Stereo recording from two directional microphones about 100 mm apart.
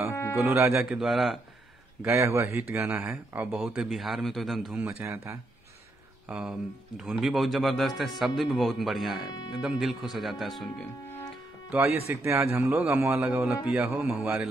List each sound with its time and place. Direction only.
0.1 s music: 30° left (ahead or behind)
0.4 s speech: 25° right (ahead or behind)
0.8 s speech: 5° right (ahead or behind)
2.0 s speech: 25° right (ahead or behind)
3.7 s speech: 5° right (ahead or behind)
5.0 s speech: 25° right (ahead or behind)
6.2 s speech: 10° right (ahead or behind)
11.7 s speech: 20° right (ahead or behind)